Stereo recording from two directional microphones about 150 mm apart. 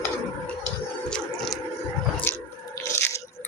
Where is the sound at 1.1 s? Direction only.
5° left (ahead or behind).